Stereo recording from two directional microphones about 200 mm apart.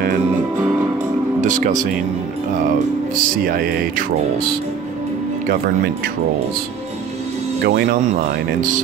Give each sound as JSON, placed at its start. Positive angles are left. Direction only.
{"t": 1.4, "sound": "speech", "side_deg": -40}
{"t": 3.2, "sound": "speech", "side_deg": -45}
{"t": 7.6, "sound": "speech", "side_deg": -55}